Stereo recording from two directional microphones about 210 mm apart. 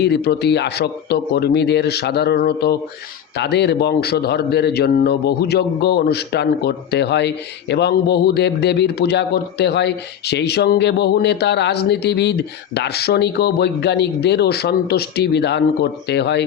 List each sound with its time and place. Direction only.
0.0 s a man's voice: 50° left (ahead or behind)